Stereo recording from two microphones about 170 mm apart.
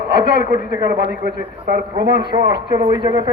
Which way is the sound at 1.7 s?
60° right (ahead or behind).